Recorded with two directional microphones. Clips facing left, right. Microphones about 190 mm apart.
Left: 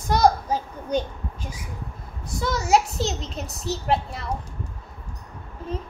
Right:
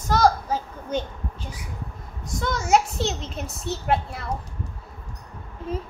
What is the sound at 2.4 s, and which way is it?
A woman's voice, centre (ahead or behind).